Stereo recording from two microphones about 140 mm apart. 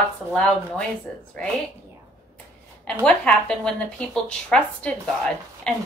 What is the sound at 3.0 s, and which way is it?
Speech, 5° left (ahead or behind).